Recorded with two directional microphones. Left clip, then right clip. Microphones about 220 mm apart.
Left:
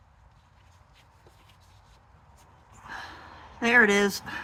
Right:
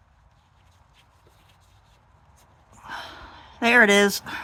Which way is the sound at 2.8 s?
20° right (ahead or behind).